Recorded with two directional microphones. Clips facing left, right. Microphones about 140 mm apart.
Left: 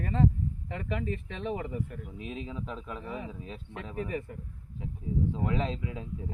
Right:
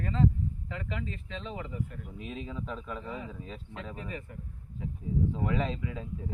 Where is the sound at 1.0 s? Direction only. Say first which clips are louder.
Left 4 dB; 50° left (ahead or behind).